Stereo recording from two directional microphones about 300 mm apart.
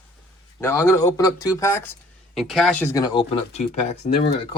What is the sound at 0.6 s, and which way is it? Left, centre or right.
Speech, centre.